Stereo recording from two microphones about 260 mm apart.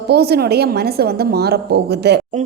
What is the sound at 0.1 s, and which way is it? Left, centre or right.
A woman's voice, right.